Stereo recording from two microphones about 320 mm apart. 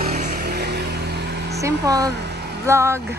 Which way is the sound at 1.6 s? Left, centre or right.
Centre.